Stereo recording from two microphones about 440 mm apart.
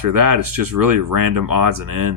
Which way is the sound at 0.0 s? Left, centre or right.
Right.